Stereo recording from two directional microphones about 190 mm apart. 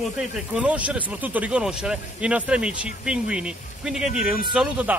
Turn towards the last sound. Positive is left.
turn(degrees=-5)  # may be behind; listen again after turning